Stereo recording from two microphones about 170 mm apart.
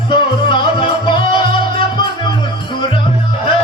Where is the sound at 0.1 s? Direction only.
25° left (ahead or behind).